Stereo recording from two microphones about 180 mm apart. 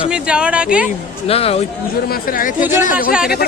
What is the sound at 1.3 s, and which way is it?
Speech, 35° left (ahead or behind).